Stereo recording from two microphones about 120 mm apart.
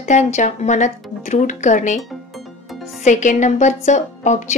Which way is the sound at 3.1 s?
90° left.